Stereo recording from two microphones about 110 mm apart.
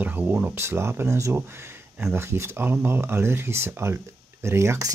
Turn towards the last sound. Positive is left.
turn(degrees=-25)  # may be behind; listen again after turning